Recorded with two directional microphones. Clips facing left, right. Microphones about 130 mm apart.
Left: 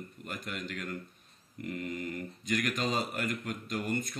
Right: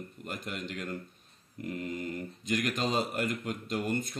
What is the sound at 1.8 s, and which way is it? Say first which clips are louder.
Speech: right 1 dB; 25° right (ahead or behind).